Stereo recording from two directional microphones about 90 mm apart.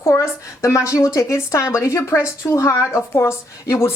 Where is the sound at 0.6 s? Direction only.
35° left (ahead or behind).